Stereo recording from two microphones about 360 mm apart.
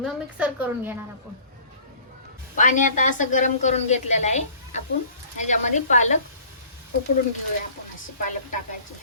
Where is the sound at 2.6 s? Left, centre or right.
Left.